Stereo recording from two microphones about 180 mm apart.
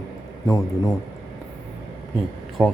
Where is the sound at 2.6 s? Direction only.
5° right (ahead or behind).